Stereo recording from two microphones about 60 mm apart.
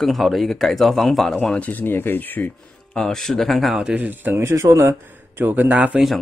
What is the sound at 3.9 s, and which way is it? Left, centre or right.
Speech, right.